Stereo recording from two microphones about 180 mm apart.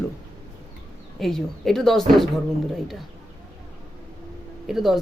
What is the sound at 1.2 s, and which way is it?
Speech, centre (ahead or behind).